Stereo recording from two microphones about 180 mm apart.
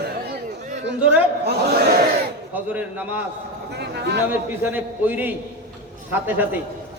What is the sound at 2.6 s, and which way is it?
Speech, 10° right (ahead or behind).